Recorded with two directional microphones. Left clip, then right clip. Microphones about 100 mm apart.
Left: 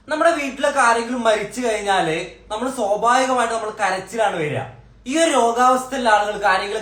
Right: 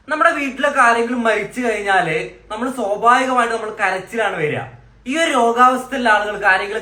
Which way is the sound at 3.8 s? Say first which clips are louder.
Right 1 dB; 35° left (ahead or behind).